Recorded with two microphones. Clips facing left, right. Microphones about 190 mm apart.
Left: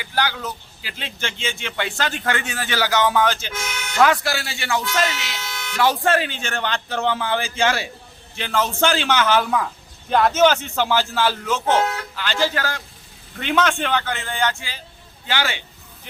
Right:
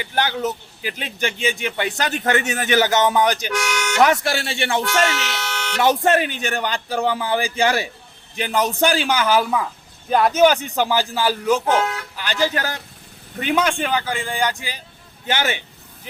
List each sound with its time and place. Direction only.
0.1 s a man's voice: 20° right (ahead or behind)
3.5 s speech: 80° right
4.0 s a man's voice: 25° right (ahead or behind)
4.8 s speech: 65° right (ahead or behind)
5.8 s a man's voice: 20° right (ahead or behind)